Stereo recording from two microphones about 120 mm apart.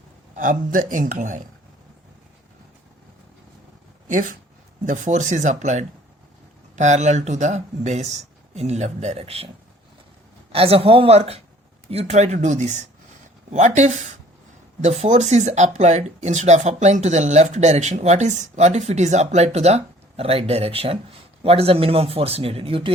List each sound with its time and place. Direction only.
0.9 s speech: 90° right
4.9 s speech: 90° right; by 9.5 s 55° right (ahead or behind)
10.5 s speech: 55° right (ahead or behind); by 14.0 s 80° right
14.8 s speech: 90° right; by 22.9 s 50° right (ahead or behind)